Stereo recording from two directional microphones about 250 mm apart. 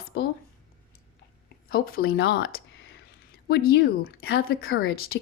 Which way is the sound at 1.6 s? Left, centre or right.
Left.